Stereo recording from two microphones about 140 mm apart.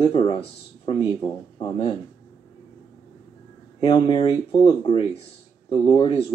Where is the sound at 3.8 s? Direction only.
40° left (ahead or behind).